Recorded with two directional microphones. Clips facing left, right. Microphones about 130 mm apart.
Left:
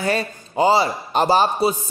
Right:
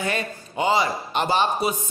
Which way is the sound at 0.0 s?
35° left (ahead or behind).